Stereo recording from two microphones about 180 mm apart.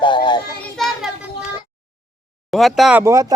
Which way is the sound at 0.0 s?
25° left (ahead or behind).